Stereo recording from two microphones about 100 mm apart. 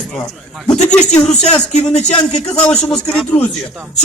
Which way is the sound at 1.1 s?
10° left (ahead or behind).